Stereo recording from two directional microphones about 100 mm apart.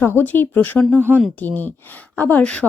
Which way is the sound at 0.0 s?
25° left (ahead or behind).